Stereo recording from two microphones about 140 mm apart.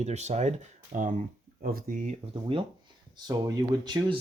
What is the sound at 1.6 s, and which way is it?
Speech, 90° right.